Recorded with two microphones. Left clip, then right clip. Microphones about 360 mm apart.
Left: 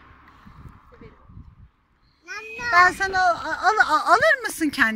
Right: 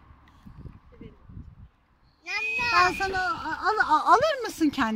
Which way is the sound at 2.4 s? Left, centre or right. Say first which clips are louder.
Left 5 dB; centre.